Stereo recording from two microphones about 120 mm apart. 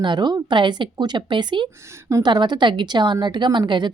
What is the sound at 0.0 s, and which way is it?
A woman's voice, 40° right (ahead or behind).